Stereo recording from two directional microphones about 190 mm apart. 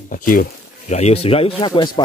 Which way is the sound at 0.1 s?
45° left (ahead or behind).